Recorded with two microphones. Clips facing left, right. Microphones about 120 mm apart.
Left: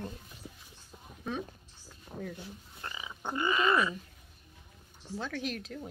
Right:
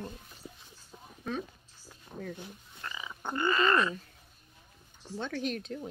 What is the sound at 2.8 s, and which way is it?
Frog, 25° left (ahead or behind).